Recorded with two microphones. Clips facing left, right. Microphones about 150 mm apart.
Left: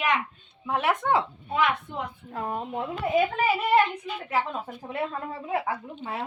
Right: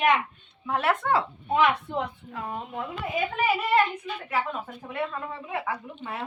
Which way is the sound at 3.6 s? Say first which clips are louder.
Left 2 dB; 20° left (ahead or behind).